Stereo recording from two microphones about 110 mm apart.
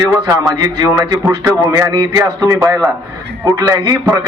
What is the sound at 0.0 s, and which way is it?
A man's voice, 25° right (ahead or behind).